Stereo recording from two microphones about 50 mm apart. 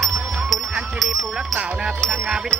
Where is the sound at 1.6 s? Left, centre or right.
Right.